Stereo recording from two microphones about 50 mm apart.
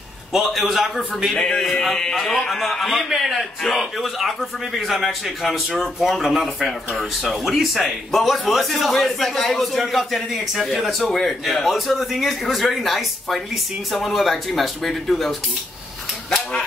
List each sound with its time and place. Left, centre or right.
0.3 s a man's voice: centre
1.3 s a man's voice: centre